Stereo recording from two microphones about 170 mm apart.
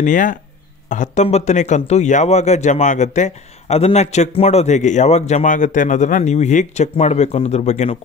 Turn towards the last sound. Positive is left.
turn(degrees=40)  # may be behind; listen again after turning